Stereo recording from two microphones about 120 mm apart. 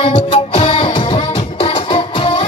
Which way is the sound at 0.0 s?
50° left (ahead or behind).